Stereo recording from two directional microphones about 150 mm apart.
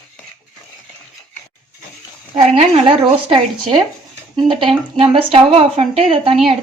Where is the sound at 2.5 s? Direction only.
40° right (ahead or behind).